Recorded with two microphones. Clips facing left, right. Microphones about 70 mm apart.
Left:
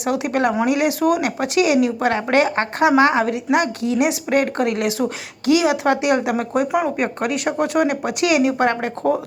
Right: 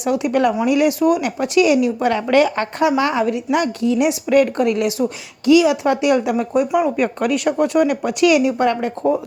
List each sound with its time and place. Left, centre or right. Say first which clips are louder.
0.0 s speech: right 2 dB; left
0.3 s a woman's voice: right 2 dB; left
0.9 s a woman's voice: right 1 dB; left
7.7 s a woman's voice: right 2 dB; left